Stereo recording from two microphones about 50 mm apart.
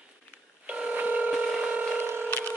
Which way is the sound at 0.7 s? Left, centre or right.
Right.